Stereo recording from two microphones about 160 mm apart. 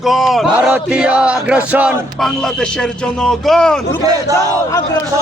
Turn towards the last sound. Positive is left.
turn(degrees=-25)  # may be behind; listen again after turning